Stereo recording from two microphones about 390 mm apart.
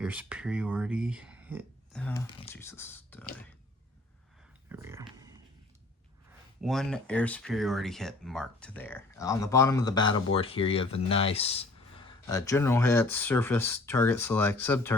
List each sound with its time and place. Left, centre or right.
0.0 s speech: centre
4.7 s a sound: centre
6.6 s speech: centre